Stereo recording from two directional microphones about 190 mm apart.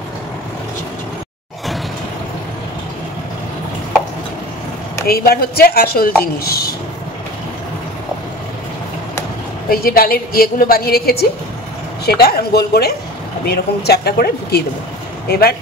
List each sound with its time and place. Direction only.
5.0 s speech: 55° left (ahead or behind)
9.7 s a woman's voice: 50° left (ahead or behind)